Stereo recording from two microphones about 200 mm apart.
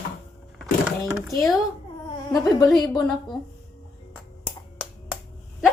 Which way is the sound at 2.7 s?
20° left (ahead or behind).